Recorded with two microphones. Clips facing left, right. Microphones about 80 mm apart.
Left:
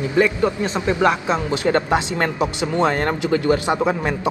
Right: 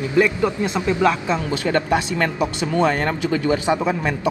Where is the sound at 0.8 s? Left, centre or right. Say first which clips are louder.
Even; left.